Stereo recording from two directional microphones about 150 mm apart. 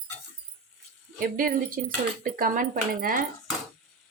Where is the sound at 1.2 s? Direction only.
70° right (ahead or behind).